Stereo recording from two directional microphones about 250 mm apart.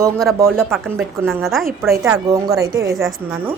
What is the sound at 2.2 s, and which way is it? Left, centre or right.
Speech, centre.